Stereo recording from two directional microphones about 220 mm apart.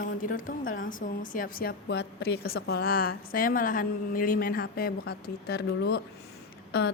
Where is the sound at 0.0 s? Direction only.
40° left (ahead or behind).